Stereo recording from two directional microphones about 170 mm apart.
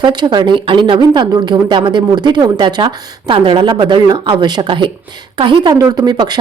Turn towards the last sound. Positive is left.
turn(degrees=-25)  # may be behind; listen again after turning